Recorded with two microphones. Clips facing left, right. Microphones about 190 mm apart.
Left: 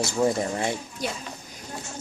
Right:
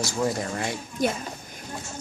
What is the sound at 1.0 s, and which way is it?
Speech, 50° right (ahead or behind).